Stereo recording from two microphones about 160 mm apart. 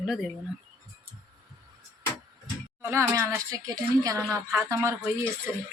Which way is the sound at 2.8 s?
15° right (ahead or behind).